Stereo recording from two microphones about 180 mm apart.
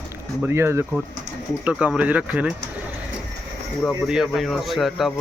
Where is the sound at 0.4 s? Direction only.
15° right (ahead or behind).